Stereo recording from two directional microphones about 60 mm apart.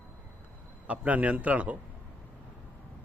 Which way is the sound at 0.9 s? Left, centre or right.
Right.